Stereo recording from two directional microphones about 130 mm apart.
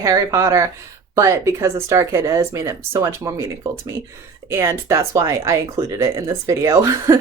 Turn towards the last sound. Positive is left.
turn(degrees=-25)  # may be behind; listen again after turning